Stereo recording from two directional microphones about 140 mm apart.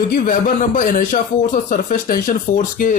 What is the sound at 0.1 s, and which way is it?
Speech, 70° left (ahead or behind).